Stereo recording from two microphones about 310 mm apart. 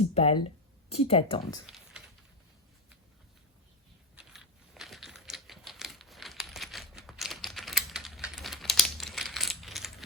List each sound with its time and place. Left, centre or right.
0.1 s speech: centre
1.6 s a sound: centre
4.1 s typewriter: centre